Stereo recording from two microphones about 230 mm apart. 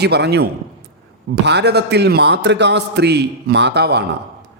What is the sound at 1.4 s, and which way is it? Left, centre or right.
A man's voice, right.